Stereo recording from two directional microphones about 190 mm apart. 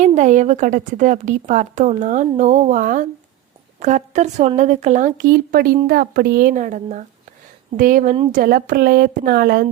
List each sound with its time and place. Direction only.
0.0 s a woman's voice: 40° right (ahead or behind)
8.1 s a woman's voice: 30° right (ahead or behind)
8.4 s speech: 50° right (ahead or behind)